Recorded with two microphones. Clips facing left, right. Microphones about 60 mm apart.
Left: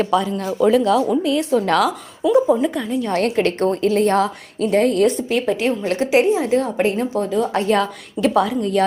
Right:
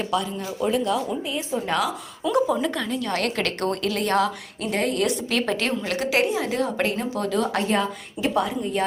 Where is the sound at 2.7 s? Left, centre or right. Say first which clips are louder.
Left 5 dB; centre.